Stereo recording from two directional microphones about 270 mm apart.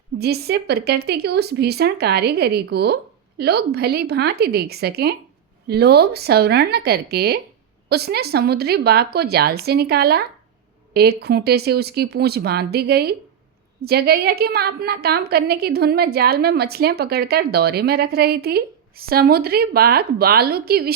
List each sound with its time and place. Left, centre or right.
0.2 s a woman's voice: right